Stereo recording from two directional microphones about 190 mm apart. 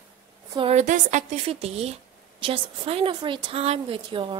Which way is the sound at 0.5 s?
35° right (ahead or behind).